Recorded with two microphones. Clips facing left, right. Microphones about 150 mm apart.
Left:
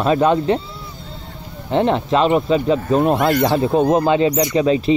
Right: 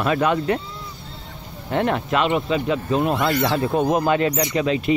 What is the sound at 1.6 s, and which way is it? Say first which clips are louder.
Speech: left 5 dB; 25° left (ahead or behind).